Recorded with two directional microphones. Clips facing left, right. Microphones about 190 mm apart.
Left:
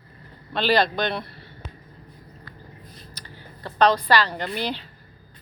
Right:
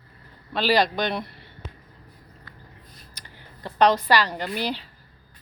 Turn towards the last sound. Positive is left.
turn(degrees=-10)  # may be behind; listen again after turning